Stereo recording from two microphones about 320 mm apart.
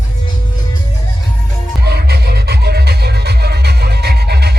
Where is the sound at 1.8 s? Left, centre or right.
Right.